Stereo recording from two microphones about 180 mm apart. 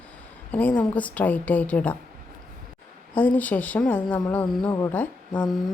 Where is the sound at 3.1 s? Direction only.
10° left (ahead or behind).